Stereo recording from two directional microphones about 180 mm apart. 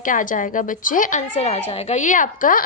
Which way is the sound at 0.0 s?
50° left (ahead or behind).